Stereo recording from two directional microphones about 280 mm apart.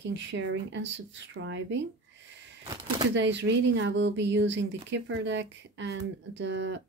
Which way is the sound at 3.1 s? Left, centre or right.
Right.